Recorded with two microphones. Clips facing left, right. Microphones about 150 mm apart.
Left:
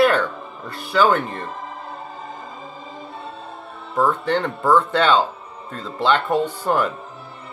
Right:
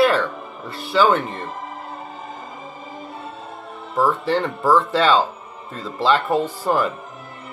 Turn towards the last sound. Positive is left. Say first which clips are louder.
# even
turn(degrees=-5)  # may be behind; listen again after turning